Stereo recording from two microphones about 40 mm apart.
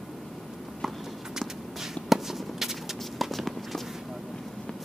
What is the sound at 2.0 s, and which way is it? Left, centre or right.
Firecracker, centre.